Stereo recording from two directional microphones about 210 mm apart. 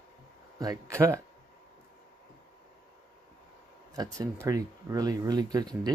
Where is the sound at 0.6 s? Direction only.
15° right (ahead or behind).